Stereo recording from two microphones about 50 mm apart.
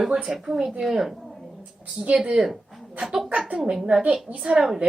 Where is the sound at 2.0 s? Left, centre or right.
Right.